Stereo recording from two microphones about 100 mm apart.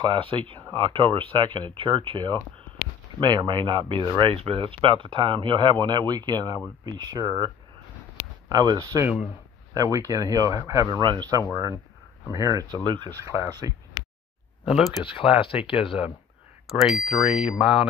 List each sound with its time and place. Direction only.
0.0 s speech: 55° right (ahead or behind)
4.2 s speech: 65° right (ahead or behind); by 11.0 s 35° right (ahead or behind)
11.0 s speech: 50° right (ahead or behind)
12.8 s speech: 50° right (ahead or behind)
13.1 s speech: 30° right (ahead or behind)
14.6 s speech: centre (ahead or behind)
15.4 s speech: 60° left (ahead or behind)
16.6 s speech: centre (ahead or behind)